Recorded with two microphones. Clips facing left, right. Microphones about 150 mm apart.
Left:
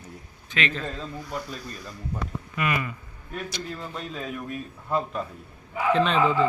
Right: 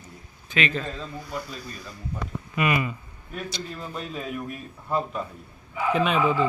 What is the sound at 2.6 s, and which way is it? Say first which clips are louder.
Speech: right 3 dB; 20° right (ahead or behind).